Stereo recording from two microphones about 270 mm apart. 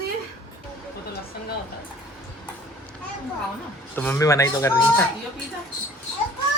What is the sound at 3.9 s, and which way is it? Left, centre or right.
Speech, centre.